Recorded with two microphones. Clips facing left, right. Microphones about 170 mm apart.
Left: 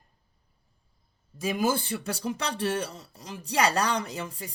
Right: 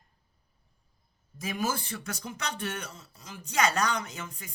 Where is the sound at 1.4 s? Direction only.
30° left (ahead or behind).